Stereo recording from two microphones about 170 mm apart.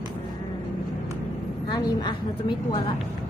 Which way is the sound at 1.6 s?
25° left (ahead or behind).